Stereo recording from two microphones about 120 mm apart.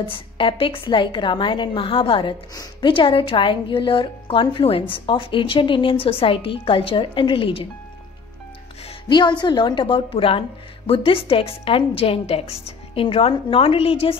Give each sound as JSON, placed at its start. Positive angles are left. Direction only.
{"t": 0.0, "sound": "a woman's voice", "side_deg": 45}
{"t": 2.5, "sound": "a woman's voice", "side_deg": 30}
{"t": 2.9, "sound": "a woman's voice", "side_deg": 45}
{"t": 9.4, "sound": "a woman's voice", "side_deg": 40}